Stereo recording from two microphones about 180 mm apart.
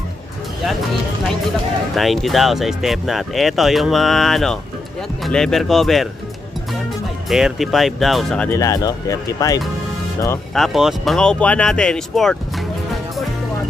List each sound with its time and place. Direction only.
2.0 s speech: centre (ahead or behind)
7.2 s speech: centre (ahead or behind)
8.5 s speech: 20° left (ahead or behind)
10.5 s speech: centre (ahead or behind)